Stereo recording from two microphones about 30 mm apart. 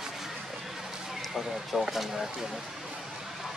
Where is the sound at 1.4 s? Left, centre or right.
Centre.